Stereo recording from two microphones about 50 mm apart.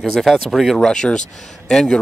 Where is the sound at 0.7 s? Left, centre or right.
Centre.